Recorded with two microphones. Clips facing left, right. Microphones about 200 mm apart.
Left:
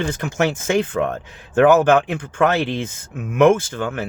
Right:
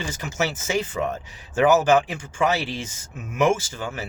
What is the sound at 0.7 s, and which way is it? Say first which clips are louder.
Speech: left 5 dB; 55° left (ahead or behind).